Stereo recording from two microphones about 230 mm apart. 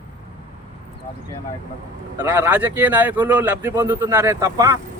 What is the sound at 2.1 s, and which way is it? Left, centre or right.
Speech, centre.